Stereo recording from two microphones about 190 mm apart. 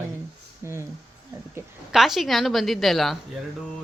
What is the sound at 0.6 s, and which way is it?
Speech, 15° right (ahead or behind).